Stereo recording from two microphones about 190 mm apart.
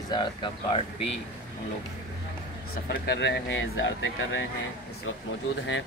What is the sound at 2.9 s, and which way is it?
Speech, 60° left (ahead or behind).